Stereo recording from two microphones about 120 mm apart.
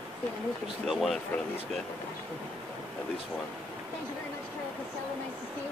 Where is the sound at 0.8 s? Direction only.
Centre (ahead or behind).